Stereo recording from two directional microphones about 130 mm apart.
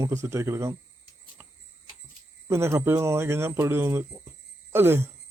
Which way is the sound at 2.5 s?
20° right (ahead or behind).